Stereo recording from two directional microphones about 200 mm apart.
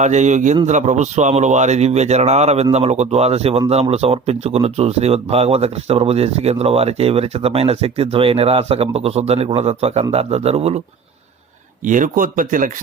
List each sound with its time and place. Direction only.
0.0 s speech: 35° right (ahead or behind)
11.8 s speech: 40° right (ahead or behind)